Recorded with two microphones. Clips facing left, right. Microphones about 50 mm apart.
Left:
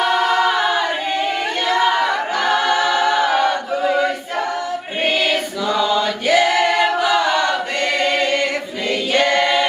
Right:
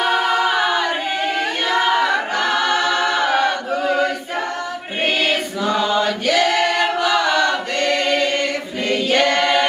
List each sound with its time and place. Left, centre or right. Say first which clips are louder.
0.0 s a capella: left 1 dB; centre
3.2 s choir: left 1 dB; centre
5.6 s chant: even; right
6.2 s choir: left 4 dB; centre
9.1 s a capella: left 1 dB; centre